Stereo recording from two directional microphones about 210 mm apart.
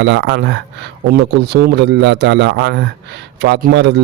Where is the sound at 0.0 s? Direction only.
55° right (ahead or behind).